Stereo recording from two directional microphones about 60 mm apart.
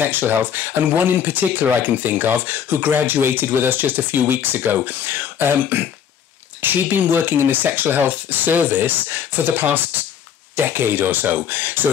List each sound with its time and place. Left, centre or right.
0.0 s speech: right